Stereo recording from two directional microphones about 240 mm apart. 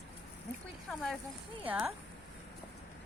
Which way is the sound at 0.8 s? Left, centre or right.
Centre.